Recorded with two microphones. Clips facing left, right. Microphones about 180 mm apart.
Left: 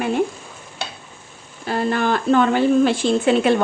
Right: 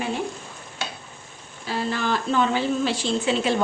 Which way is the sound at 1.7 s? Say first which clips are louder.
Left 5 dB; 55° left (ahead or behind).